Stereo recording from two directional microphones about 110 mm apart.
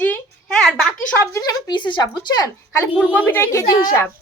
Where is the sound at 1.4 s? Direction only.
35° left (ahead or behind).